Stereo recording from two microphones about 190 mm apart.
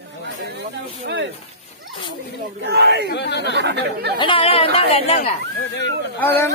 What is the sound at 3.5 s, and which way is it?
Speech, 65° right (ahead or behind).